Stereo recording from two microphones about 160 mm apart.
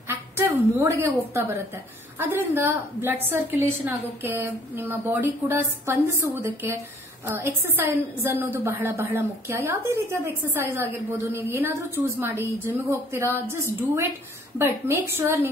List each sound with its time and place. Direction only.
0.1 s a woman's voice: 15° right (ahead or behind)